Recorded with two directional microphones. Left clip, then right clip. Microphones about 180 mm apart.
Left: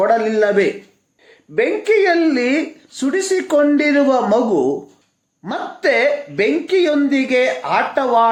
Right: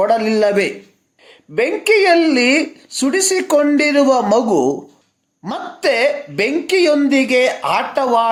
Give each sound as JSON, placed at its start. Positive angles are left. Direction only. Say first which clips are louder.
{"t": 0.0, "sound": "a man's voice", "louder": "right 1 dB", "side_deg": -40}